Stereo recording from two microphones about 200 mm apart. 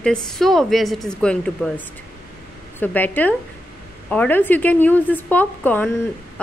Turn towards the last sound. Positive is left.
turn(degrees=10)  # may be behind; listen again after turning